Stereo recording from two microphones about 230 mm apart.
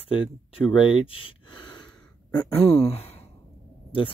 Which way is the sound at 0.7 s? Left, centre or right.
Left.